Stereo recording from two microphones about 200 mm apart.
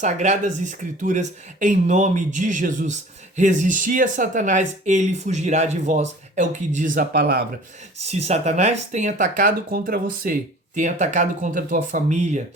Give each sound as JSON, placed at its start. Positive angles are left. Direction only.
{"t": 0.0, "sound": "speech", "side_deg": -35}
{"t": 8.0, "sound": "speech", "side_deg": -35}
{"t": 10.8, "sound": "speech", "side_deg": -35}